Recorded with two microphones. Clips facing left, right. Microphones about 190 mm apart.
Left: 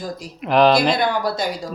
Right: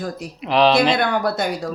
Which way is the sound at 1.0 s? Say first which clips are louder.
Right 1 dB; 60° right (ahead or behind).